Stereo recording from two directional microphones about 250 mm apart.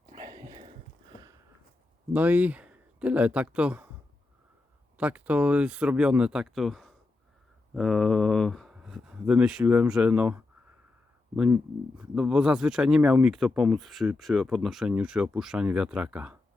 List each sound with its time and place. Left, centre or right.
0.2 s a sound: centre
2.1 s speech: centre
4.9 s speech: centre